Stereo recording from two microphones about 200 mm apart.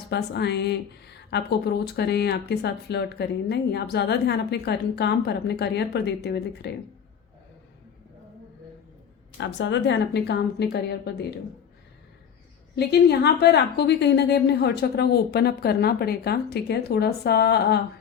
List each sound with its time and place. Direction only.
0.1 s a woman's voice: 55° left (ahead or behind)
9.4 s a woman's voice: 65° left (ahead or behind)
12.7 s a woman's voice: 55° left (ahead or behind)